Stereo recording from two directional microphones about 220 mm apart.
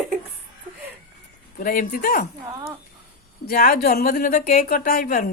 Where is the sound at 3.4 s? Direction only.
40° left (ahead or behind).